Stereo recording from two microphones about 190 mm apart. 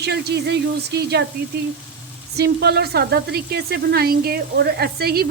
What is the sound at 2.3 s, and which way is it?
Speech, 60° right (ahead or behind).